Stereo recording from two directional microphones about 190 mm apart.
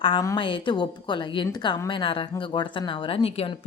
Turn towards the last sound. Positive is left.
turn(degrees=30)  # may be behind; listen again after turning